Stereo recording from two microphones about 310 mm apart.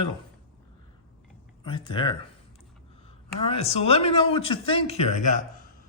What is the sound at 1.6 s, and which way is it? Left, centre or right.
Speech, centre.